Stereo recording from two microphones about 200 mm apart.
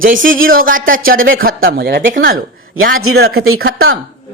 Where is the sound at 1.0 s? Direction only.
80° right.